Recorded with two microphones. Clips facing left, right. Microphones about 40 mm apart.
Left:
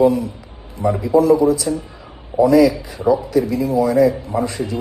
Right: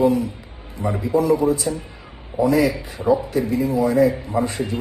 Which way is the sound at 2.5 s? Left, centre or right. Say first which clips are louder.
Left 5 dB; right.